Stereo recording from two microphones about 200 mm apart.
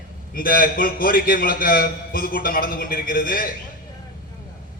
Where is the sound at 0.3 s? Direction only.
45° left (ahead or behind).